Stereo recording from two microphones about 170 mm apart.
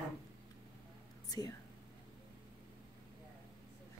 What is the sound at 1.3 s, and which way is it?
Speech, 20° left (ahead or behind).